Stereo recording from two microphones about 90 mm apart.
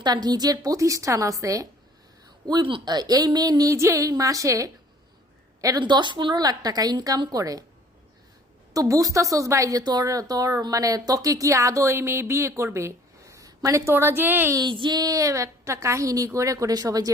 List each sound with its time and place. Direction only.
0.0 s a woman's voice: 50° right (ahead or behind)
2.5 s speech: 65° right (ahead or behind)
2.9 s a woman's voice: 45° right (ahead or behind)
5.8 s a woman's voice: 60° right (ahead or behind); by 7.6 s 45° right (ahead or behind)
8.7 s a woman's voice: 40° right (ahead or behind); by 14.5 s 25° right (ahead or behind)
14.5 s a woman's voice: 60° right (ahead or behind)